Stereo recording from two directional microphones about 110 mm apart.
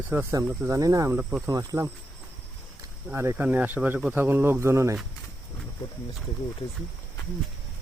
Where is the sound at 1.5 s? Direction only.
35° right (ahead or behind).